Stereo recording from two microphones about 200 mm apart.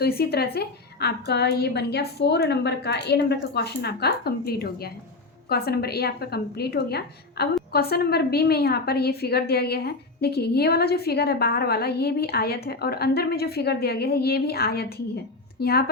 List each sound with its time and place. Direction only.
0.0 s a woman's voice: 50° left (ahead or behind)